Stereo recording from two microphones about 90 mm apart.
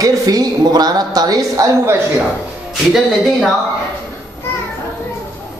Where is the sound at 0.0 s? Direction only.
45° right (ahead or behind).